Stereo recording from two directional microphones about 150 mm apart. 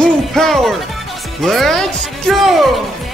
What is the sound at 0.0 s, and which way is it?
Music, centre (ahead or behind).